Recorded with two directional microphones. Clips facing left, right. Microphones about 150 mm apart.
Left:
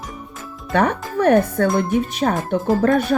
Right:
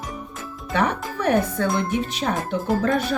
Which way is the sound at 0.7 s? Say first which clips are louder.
Left 4 dB; 50° left (ahead or behind).